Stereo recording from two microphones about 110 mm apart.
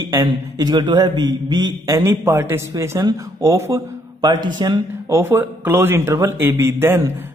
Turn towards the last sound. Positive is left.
turn(degrees=-20)  # may be behind; listen again after turning